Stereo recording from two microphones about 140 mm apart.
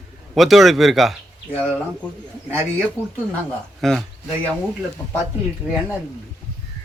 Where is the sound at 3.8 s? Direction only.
Centre (ahead or behind).